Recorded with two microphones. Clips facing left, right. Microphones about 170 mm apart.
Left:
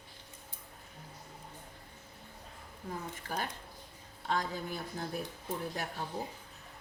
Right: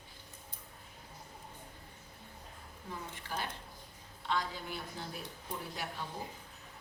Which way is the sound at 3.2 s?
50° left (ahead or behind).